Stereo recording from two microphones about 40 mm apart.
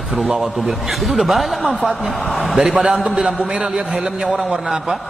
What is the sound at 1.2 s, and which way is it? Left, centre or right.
Speech, centre.